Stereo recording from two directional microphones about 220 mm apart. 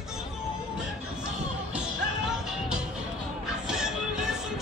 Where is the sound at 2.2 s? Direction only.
Centre (ahead or behind).